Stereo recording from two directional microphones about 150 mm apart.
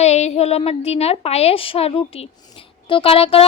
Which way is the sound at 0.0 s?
45° left (ahead or behind).